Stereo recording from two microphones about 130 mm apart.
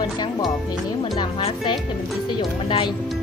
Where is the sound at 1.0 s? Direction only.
35° left (ahead or behind).